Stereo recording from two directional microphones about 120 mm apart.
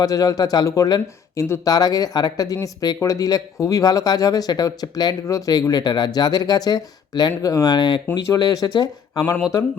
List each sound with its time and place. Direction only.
0.0 s speech: 30° left (ahead or behind)